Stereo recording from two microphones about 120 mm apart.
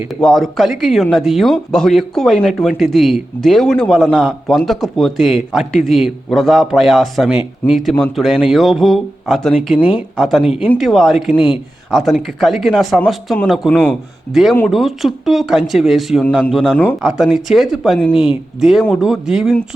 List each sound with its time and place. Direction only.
0.2 s speech: centre (ahead or behind)
10.4 s speech: 55° left (ahead or behind)
10.8 s speech: centre (ahead or behind)
13.7 s a man's voice: 10° left (ahead or behind)
14.3 s speech: centre (ahead or behind)